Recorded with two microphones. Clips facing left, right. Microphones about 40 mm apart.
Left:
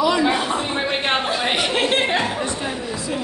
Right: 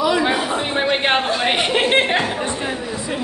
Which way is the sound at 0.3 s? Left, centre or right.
Centre.